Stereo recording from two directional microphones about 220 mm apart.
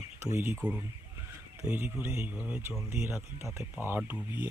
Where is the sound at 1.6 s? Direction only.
5° right (ahead or behind).